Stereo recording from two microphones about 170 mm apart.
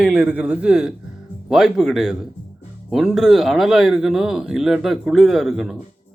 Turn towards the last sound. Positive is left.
turn(degrees=0)  # may be behind; listen again after turning